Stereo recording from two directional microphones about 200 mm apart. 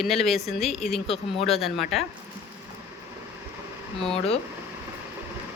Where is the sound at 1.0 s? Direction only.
30° left (ahead or behind).